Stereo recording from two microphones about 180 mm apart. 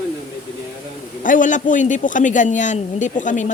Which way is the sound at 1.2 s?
45° left (ahead or behind).